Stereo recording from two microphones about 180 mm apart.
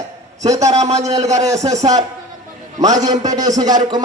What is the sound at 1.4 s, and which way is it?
Speech, 20° right (ahead or behind).